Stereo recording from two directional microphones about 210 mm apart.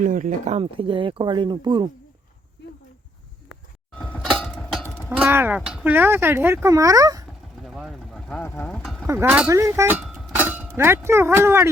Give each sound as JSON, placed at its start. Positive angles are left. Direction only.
{"t": 0.0, "sound": "speech", "side_deg": -40}
{"t": 3.9, "sound": "a sound", "side_deg": 5}
{"t": 5.0, "sound": "speech", "side_deg": -5}
{"t": 7.6, "sound": "a sound", "side_deg": 0}
{"t": 8.4, "sound": "speech", "side_deg": 10}
{"t": 9.0, "sound": "speech", "side_deg": -10}